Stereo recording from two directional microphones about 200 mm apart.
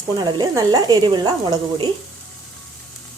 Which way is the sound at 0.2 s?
20° right (ahead or behind).